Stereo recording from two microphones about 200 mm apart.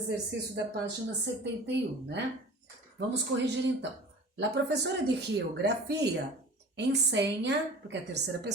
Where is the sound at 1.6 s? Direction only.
60° right (ahead or behind).